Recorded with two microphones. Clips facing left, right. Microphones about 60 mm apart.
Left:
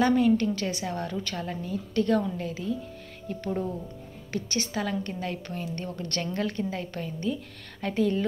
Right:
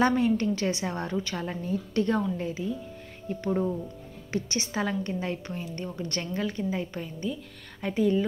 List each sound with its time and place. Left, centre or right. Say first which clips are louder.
0.2 s a woman's voice: left 2 dB; right